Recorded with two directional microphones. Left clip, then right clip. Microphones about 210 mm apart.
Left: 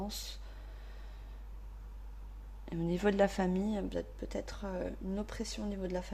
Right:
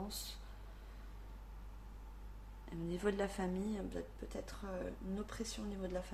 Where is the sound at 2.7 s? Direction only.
40° left (ahead or behind).